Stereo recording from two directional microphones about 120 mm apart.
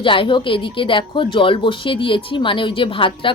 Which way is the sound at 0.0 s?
45° left (ahead or behind).